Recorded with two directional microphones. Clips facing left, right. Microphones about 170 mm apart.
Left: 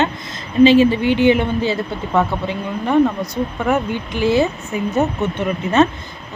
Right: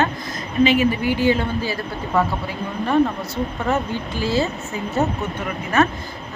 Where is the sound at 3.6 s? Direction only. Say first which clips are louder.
Left 4 dB; 20° left (ahead or behind).